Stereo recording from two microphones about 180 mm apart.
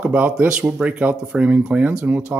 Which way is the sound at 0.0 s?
10° right (ahead or behind).